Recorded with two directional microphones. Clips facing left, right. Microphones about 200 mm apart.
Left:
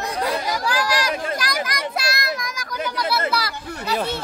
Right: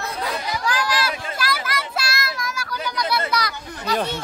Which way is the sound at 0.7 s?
15° left (ahead or behind).